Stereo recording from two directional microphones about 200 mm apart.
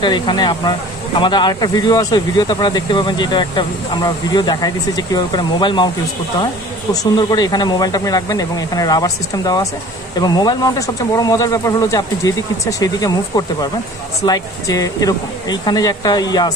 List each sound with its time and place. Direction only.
0.0 s speech: 25° left (ahead or behind)
14.2 s speech: 20° left (ahead or behind)